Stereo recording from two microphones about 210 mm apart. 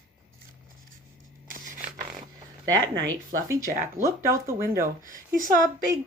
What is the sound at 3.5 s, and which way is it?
Speech, 15° right (ahead or behind).